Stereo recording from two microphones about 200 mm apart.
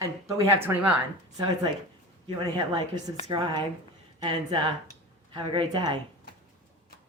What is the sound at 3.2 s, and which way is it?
A woman's voice, 20° right (ahead or behind).